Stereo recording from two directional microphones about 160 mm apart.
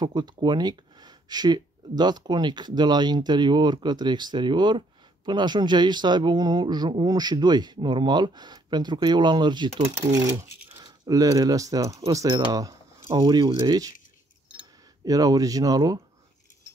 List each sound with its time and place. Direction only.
0.0 s speech: 25° right (ahead or behind)
15.0 s speech: 20° right (ahead or behind)